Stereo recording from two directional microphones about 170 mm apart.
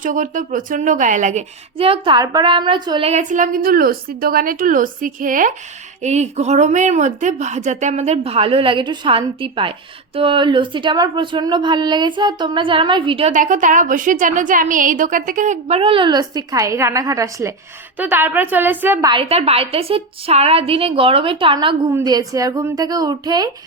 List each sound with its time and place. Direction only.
0.0 s a woman's voice: 50° right (ahead or behind); by 3.1 s 25° right (ahead or behind)
3.1 s a woman's voice: 45° right (ahead or behind)
13.3 s a woman's voice: 50° right (ahead or behind); by 18.9 s 10° right (ahead or behind)
19.0 s a woman's voice: 30° right (ahead or behind)